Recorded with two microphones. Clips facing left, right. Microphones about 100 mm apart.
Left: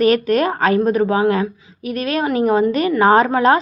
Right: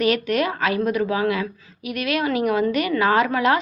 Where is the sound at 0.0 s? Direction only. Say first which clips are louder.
Left 6 dB; 40° left (ahead or behind).